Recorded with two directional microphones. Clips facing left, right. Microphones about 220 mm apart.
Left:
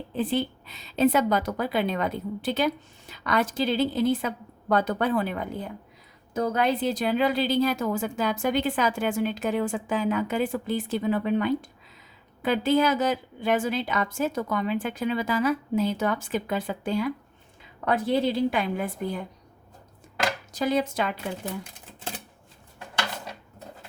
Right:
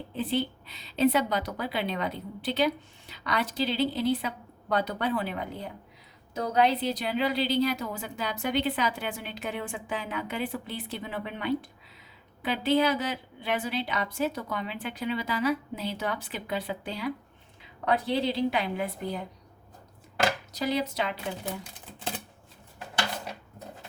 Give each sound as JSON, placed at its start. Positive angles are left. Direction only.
{"t": 0.2, "sound": "a woman's voice", "side_deg": 45}
{"t": 20.5, "sound": "a woman's voice", "side_deg": 50}